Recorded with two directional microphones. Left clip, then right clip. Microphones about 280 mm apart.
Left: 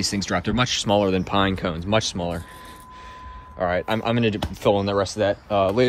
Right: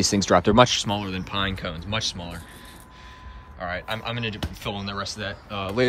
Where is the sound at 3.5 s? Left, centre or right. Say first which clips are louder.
Left 7 dB; centre.